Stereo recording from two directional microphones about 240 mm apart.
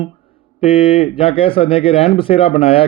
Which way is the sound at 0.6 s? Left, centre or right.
Left.